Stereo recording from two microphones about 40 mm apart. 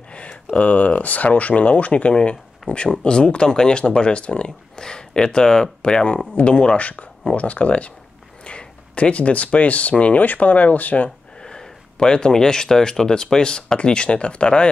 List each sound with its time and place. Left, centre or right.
0.6 s speech: left
3.0 s speech: left
7.3 s speech: left
11.4 s speech: centre